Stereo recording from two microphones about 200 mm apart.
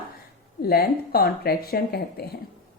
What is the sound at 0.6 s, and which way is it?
Speech, 50° left (ahead or behind).